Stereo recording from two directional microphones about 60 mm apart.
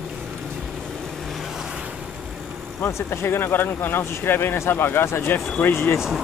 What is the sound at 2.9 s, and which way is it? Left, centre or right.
Speech, left.